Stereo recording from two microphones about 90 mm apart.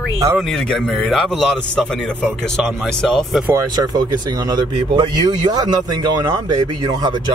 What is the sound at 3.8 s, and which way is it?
Speech, 50° right (ahead or behind).